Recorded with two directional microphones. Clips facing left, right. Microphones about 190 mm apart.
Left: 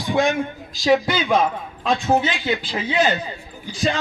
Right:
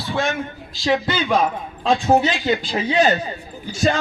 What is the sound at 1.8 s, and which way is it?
A man's voice, 35° right (ahead or behind).